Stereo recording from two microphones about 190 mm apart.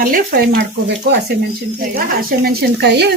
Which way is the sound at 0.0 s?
50° right (ahead or behind).